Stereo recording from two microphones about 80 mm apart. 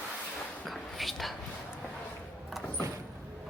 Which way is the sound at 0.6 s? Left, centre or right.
Centre.